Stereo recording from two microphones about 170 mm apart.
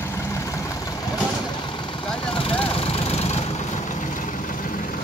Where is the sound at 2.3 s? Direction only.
30° left (ahead or behind); by 4.9 s 55° left (ahead or behind).